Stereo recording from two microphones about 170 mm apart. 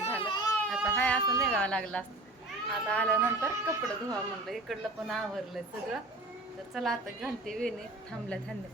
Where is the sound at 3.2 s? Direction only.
15° right (ahead or behind).